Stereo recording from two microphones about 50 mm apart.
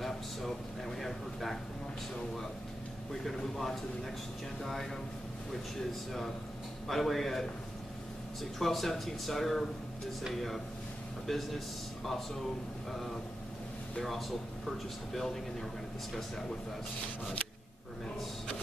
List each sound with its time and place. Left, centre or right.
0.0 s a sound: centre
3.3 s speech: centre
6.9 s speech: centre
11.2 s a man's voice: centre
13.9 s speech: centre
16.1 s speech: centre